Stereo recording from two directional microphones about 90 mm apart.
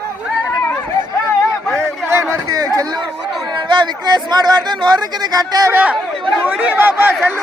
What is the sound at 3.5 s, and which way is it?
Speech, 60° right (ahead or behind).